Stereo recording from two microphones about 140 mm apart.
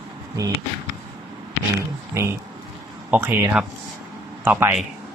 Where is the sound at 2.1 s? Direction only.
20° right (ahead or behind).